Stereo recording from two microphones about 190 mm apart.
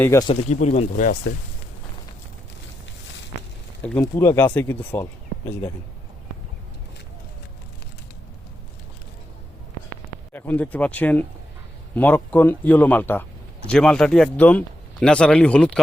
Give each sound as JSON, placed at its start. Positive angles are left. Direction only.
{"t": 0.0, "sound": "speech", "side_deg": 15}
{"t": 0.5, "sound": "speech", "side_deg": 40}
{"t": 3.8, "sound": "speech", "side_deg": 15}
{"t": 10.3, "sound": "speech", "side_deg": 10}